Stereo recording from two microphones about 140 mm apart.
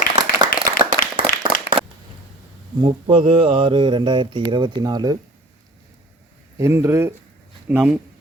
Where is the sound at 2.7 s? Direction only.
35° right (ahead or behind).